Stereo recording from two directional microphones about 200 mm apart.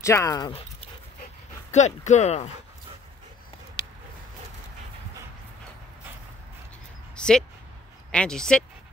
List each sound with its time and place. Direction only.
0.0 s speech: 15° left (ahead or behind)
0.5 s speech: 30° left (ahead or behind)
7.2 s speech: 5° left (ahead or behind)